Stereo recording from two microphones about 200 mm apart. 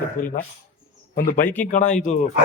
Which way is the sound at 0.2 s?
40° left (ahead or behind).